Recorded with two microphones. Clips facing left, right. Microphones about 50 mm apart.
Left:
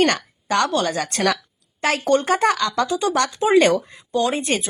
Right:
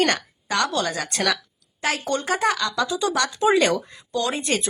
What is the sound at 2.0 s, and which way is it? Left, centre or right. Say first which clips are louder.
Speech: left 6 dB; left.